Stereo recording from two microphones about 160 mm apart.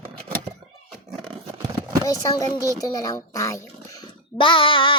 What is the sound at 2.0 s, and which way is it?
Speech, 20° left (ahead or behind).